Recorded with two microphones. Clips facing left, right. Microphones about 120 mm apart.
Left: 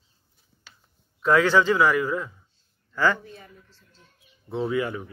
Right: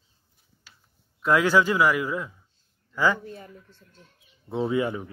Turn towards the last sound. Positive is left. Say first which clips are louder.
# right 1 dB
turn(degrees=-25)  # may be behind; listen again after turning